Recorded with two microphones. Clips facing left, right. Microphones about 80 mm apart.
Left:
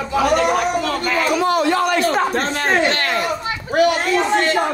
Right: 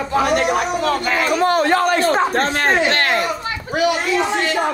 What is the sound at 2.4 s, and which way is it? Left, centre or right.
Speech, right.